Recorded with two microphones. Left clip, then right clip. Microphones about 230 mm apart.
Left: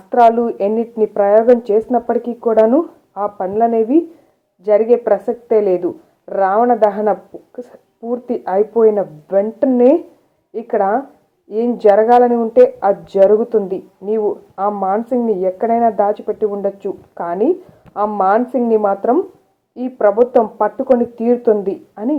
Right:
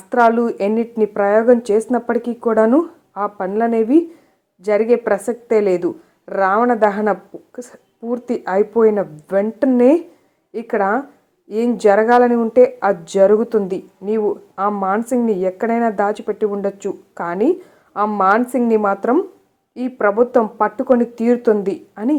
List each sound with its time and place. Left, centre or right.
0.1 s speech: right